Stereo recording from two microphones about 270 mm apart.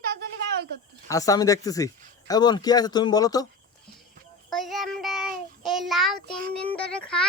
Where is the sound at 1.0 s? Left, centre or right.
Centre.